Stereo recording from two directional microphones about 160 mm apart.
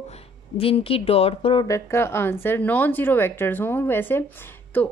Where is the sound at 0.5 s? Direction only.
35° left (ahead or behind).